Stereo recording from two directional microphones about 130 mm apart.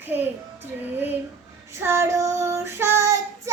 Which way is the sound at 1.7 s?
20° right (ahead or behind).